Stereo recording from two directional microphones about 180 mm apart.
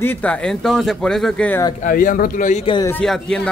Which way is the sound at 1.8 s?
50° left (ahead or behind).